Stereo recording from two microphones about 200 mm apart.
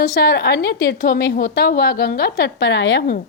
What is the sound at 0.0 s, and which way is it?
A woman's voice, 45° left (ahead or behind).